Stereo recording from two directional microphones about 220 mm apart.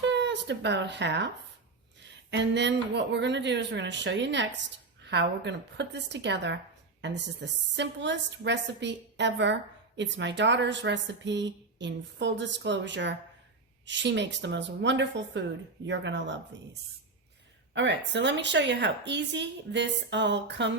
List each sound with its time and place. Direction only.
0.0 s a woman's voice: 55° right (ahead or behind)
17.7 s a woman's voice: 55° right (ahead or behind)